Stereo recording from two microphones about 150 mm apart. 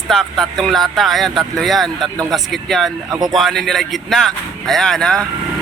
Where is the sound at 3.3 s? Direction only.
Centre (ahead or behind).